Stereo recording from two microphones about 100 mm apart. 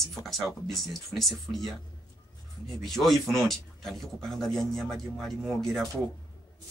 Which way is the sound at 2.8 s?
Centre (ahead or behind).